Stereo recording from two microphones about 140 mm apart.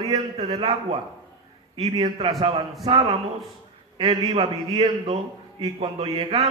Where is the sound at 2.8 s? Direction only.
45° right (ahead or behind).